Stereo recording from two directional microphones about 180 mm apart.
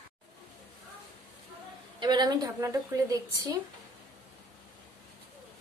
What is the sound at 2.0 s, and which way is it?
A woman's voice, 25° right (ahead or behind).